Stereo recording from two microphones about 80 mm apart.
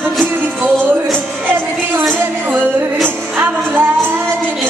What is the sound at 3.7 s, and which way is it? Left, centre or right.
Music, right.